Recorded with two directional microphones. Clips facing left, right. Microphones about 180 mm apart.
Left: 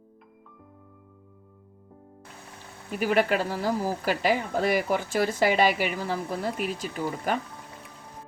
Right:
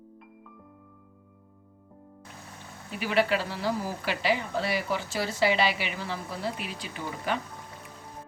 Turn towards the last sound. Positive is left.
turn(degrees=45)  # may be behind; listen again after turning